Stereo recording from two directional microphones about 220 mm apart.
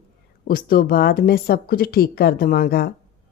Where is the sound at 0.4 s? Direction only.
40° left (ahead or behind).